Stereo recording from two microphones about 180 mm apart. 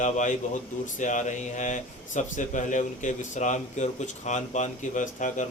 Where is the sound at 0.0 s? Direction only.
40° left (ahead or behind).